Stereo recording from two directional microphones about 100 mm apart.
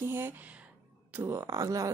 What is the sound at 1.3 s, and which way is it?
Speech, 35° right (ahead or behind).